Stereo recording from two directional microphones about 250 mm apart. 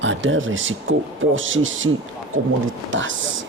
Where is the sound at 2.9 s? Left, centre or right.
Right.